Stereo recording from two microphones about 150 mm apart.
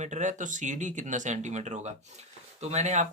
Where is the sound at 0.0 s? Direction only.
55° right (ahead or behind).